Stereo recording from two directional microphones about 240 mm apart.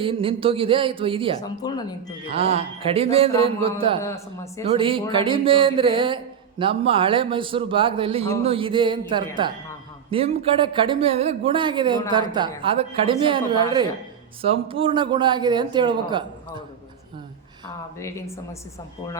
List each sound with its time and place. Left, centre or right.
0.0 s speech: right
1.4 s speech: centre
2.3 s speech: right
4.0 s speech: centre
4.7 s speech: right
18.0 s speech: centre